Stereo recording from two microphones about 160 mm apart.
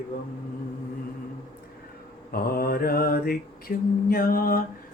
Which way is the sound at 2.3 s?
70° left (ahead or behind).